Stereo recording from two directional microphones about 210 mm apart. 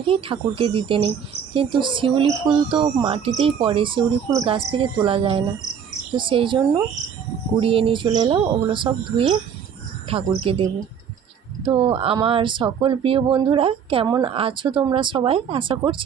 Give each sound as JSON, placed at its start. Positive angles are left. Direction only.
{"t": 0.1, "sound": "speech", "side_deg": -25}